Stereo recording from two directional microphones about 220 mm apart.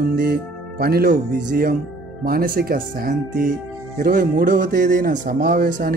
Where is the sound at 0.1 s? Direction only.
45° right (ahead or behind).